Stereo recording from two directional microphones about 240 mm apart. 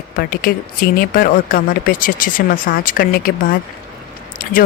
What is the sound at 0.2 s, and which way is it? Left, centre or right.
Speech, left.